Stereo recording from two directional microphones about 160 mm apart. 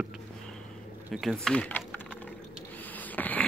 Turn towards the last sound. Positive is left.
turn(degrees=10)  # may be behind; listen again after turning